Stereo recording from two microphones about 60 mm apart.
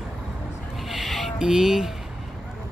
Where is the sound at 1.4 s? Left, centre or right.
Centre.